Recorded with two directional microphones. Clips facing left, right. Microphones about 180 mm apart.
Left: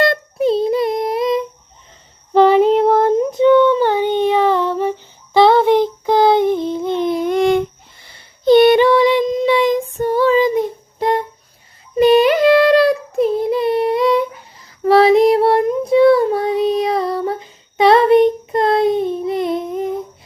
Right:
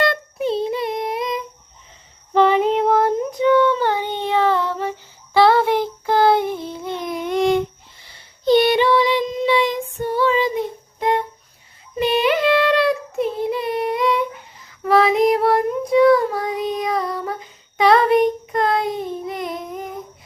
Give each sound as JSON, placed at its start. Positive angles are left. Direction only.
{"t": 0.0, "sound": "child singing", "side_deg": 40}
{"t": 2.3, "sound": "female singing", "side_deg": 35}
{"t": 2.6, "sound": "child singing", "side_deg": 35}
{"t": 3.0, "sound": "child singing", "side_deg": 20}
{"t": 6.9, "sound": "a sound", "side_deg": 25}
{"t": 7.3, "sound": "a sound", "side_deg": 55}
{"t": 8.4, "sound": "child singing", "side_deg": 50}
{"t": 11.9, "sound": "child singing", "side_deg": 40}